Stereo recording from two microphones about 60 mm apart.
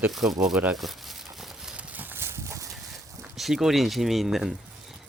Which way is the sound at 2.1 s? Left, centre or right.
Right.